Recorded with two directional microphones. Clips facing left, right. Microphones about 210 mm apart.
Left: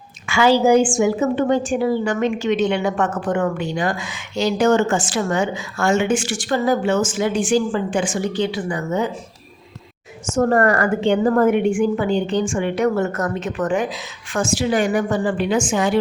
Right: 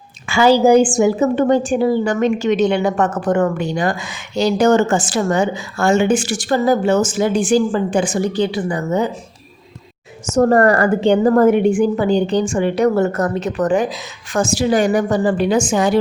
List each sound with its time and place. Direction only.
0.3 s a woman's voice: 35° right (ahead or behind)
10.3 s a woman's voice: 35° right (ahead or behind)